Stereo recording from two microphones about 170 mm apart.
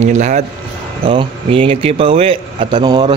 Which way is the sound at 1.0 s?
30° right (ahead or behind).